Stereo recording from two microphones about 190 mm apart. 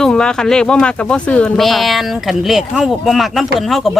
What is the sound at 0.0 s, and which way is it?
Speech, 5° left (ahead or behind).